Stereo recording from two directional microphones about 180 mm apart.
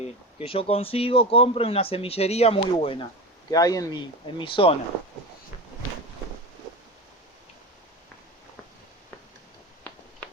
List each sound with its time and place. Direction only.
0.4 s speech: 30° left (ahead or behind)
3.5 s speech: 20° left (ahead or behind)